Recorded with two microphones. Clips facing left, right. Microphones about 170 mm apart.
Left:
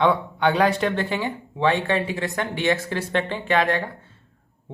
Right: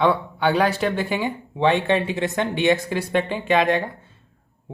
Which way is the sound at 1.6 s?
20° right (ahead or behind).